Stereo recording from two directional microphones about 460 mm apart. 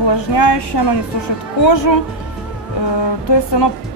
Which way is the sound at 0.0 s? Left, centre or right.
Left.